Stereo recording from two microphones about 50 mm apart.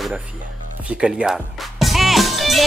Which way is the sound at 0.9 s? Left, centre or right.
Right.